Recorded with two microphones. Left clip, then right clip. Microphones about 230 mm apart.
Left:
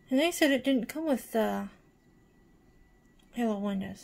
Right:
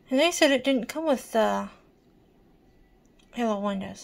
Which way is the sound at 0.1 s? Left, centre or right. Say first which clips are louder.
Right 5 dB; centre.